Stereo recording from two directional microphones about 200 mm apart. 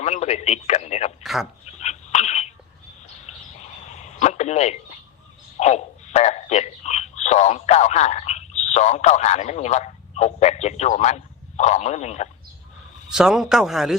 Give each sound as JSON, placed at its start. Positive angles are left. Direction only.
{"t": 0.0, "sound": "speech", "side_deg": 35}
{"t": 1.2, "sound": "speech", "side_deg": 0}
{"t": 1.6, "sound": "dog", "side_deg": 35}
{"t": 3.2, "sound": "a sound", "side_deg": 35}
{"t": 5.5, "sound": "speech", "side_deg": 35}
{"t": 13.1, "sound": "a man's voice", "side_deg": 0}